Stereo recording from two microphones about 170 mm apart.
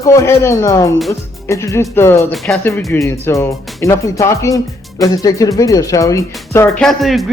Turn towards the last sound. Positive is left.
turn(degrees=0)  # may be behind; listen again after turning